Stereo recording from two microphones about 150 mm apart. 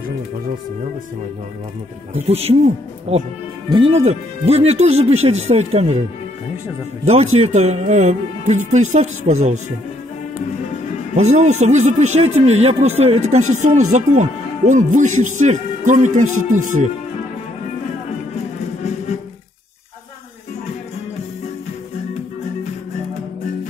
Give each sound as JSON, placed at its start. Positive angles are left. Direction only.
{"t": 2.1, "sound": "speech", "side_deg": -45}
{"t": 7.1, "sound": "speech", "side_deg": -45}
{"t": 11.1, "sound": "speech", "side_deg": -50}